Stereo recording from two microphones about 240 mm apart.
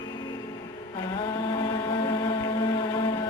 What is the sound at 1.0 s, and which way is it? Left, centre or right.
Mantra, centre.